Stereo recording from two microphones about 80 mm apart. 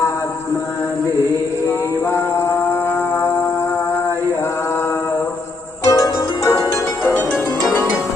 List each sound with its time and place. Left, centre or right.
2.0 s mantra: left
5.8 s harp: left
7.0 s music: left